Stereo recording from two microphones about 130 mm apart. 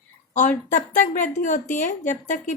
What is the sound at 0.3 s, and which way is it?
A woman's voice, 75° left (ahead or behind).